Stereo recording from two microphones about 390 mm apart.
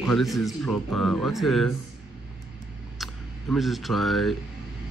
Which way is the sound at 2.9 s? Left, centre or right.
Centre.